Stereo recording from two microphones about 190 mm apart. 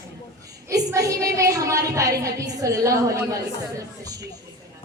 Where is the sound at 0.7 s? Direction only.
15° right (ahead or behind).